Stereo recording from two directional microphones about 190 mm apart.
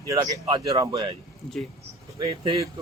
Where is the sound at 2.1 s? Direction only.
30° right (ahead or behind).